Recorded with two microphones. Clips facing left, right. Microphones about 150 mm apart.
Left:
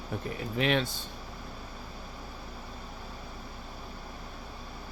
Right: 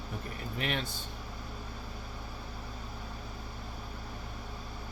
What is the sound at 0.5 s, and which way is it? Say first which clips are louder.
Speech: left 8 dB; 90° left.